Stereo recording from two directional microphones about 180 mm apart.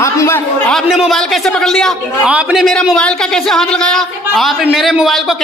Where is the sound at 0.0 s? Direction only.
15° left (ahead or behind).